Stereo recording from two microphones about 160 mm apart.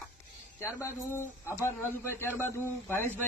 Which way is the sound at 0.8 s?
15° left (ahead or behind).